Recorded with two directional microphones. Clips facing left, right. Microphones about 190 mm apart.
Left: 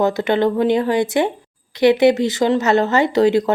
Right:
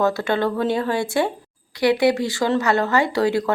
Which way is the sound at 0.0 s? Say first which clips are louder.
Left 4 dB; 20° left (ahead or behind).